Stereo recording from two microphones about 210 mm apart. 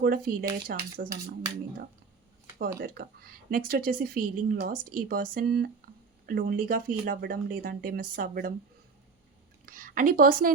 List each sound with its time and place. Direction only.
0.0 s speech: 45° right (ahead or behind)
1.1 s speech: 15° right (ahead or behind)
2.6 s speech: 45° right (ahead or behind)
9.6 s a woman's voice: 40° right (ahead or behind)